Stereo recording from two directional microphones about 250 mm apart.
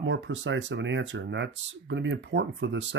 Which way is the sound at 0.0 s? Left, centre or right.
Right.